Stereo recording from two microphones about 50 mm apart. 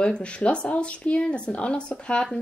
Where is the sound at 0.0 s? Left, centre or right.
Left.